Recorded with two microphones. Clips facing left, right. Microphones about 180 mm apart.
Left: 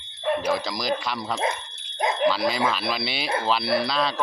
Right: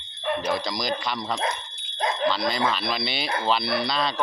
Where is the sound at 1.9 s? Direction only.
20° left (ahead or behind).